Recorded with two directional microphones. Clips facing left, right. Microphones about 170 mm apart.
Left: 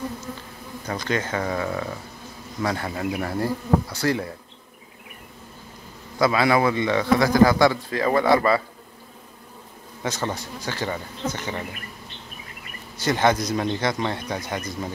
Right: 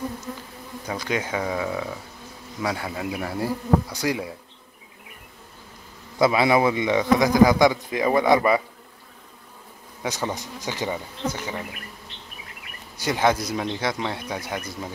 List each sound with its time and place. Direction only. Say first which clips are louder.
0.8 s a man's voice: left 1 dB; 10° right (ahead or behind)
6.1 s a man's voice: right 1 dB; 20° right (ahead or behind)
10.0 s a man's voice: even; 15° right (ahead or behind)
13.0 s a man's voice: left 1 dB; 5° right (ahead or behind)